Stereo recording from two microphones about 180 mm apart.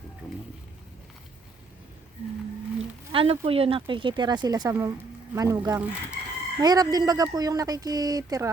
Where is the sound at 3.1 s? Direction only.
30° right (ahead or behind).